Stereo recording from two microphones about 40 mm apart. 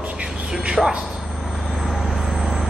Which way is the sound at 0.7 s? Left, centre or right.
Centre.